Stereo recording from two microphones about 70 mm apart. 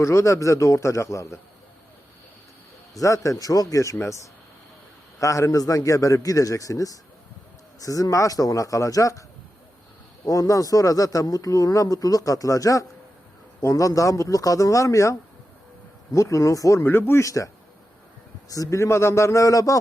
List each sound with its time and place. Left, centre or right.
0.0 s a man's voice: left
2.9 s speech: left
5.2 s a man's voice: left
10.2 s a man's voice: left
16.1 s a man's voice: left
16.8 s speech: left
17.2 s a man's voice: left